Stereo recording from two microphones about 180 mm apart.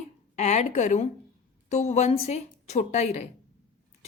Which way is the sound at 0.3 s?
40° left (ahead or behind).